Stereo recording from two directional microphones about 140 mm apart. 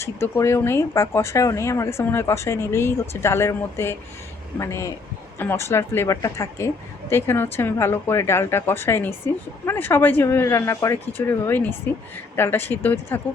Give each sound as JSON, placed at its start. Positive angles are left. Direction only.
{"t": 0.0, "sound": "speech", "side_deg": 20}